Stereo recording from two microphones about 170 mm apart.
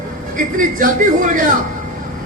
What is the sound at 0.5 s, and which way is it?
Speech, 50° right (ahead or behind).